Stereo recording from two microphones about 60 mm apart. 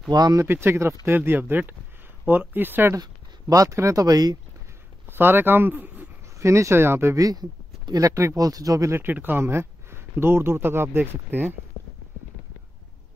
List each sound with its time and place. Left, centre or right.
0.1 s speech: right
0.5 s speech: right
1.0 s speech: right
3.0 s speech: right
5.0 s a man's voice: right
6.3 s speech: right
7.9 s speech: right
8.4 s speech: right
8.9 s speech: right